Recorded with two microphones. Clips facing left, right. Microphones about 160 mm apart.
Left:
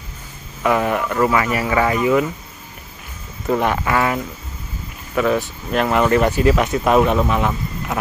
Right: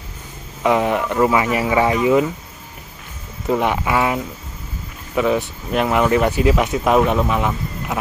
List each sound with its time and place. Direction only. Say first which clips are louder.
0.6 s speech: right 1 dB; 15° right (ahead or behind)
3.4 s speech: even; 10° right (ahead or behind)